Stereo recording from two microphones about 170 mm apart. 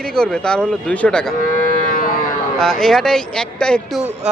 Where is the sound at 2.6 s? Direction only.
5° left (ahead or behind).